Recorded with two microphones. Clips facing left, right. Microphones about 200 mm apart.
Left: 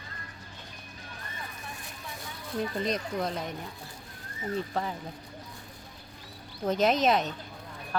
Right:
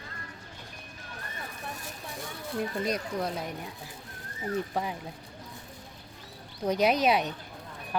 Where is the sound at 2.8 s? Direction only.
10° right (ahead or behind).